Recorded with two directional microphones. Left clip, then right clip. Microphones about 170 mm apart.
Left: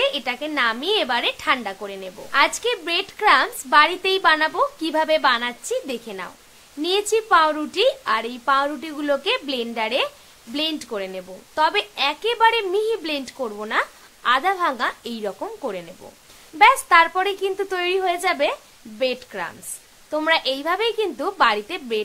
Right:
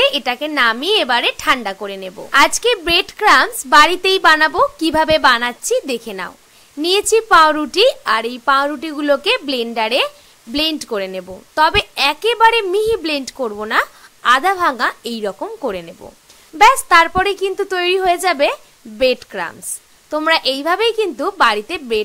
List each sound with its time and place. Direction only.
0.0 s a woman's voice: 35° right (ahead or behind)